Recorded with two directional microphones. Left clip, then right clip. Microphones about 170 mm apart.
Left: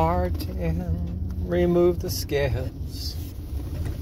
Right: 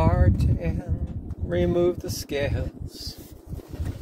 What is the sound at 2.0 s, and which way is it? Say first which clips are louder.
Speech: left 2 dB; 15° right (ahead or behind).